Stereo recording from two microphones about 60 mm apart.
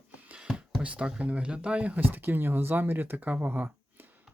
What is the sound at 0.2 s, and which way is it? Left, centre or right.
Music, right.